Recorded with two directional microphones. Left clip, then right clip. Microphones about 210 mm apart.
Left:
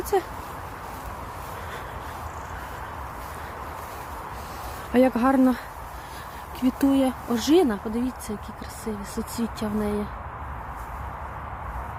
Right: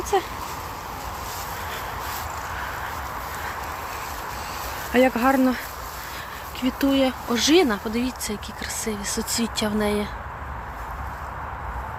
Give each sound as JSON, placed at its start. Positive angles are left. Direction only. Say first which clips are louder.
{"t": 4.9, "sound": "speech", "louder": "right 1 dB", "side_deg": 20}
{"t": 6.6, "sound": "speech", "louder": "right 1 dB", "side_deg": 25}